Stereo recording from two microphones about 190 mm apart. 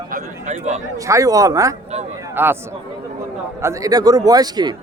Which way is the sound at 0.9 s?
15° right (ahead or behind).